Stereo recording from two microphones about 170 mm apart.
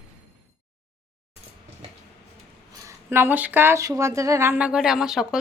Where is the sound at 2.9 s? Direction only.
15° right (ahead or behind).